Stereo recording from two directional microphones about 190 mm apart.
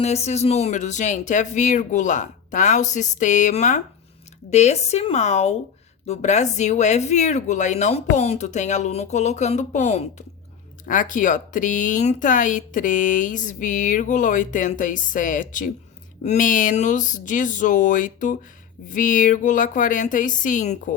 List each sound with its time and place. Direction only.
0.0 s speech: 35° left (ahead or behind)